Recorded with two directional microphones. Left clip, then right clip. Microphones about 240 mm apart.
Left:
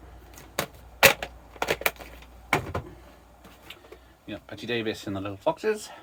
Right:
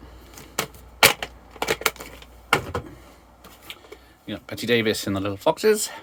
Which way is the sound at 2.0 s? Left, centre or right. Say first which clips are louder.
Right 5 dB; centre.